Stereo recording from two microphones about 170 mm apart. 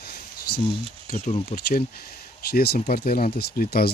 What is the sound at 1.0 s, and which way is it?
Speech, 45° left (ahead or behind).